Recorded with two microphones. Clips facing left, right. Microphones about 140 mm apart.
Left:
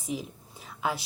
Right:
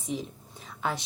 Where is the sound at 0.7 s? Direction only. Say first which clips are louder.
Left 1 dB; 5° left (ahead or behind).